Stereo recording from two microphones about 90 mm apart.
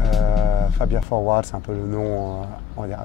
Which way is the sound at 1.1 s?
20° left (ahead or behind).